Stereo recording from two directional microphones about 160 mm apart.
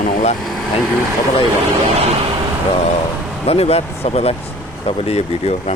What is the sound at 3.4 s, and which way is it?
Speech, 40° left (ahead or behind).